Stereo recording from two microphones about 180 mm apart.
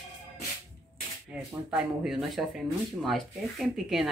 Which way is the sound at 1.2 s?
5° right (ahead or behind).